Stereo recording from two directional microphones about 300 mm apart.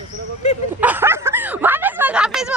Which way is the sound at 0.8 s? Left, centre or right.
Centre.